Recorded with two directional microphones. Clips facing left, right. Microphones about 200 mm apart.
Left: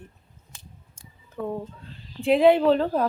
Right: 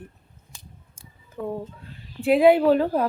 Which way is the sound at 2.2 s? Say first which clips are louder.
Right 1 dB; 5° right (ahead or behind).